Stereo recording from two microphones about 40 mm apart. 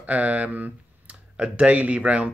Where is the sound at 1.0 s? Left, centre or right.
Right.